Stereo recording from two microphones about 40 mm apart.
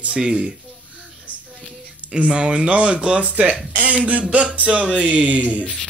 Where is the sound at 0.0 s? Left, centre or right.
Right.